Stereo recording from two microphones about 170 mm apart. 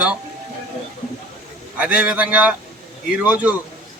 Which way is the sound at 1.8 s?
10° right (ahead or behind).